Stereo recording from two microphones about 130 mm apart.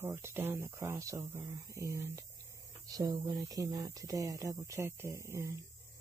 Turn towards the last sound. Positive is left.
turn(degrees=-25)  # may be behind; listen again after turning